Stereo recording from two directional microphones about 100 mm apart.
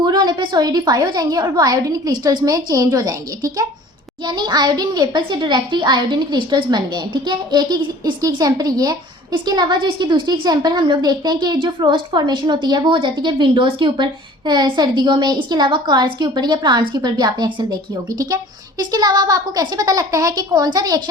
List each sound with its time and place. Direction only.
0.0 s a woman's voice: 45° right (ahead or behind)